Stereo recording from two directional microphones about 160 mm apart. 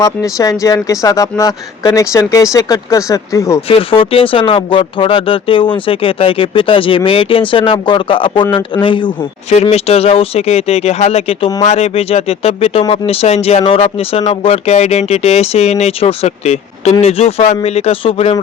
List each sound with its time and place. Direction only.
0.0 s speech: 20° left (ahead or behind)
3.7 s speech: 35° left (ahead or behind)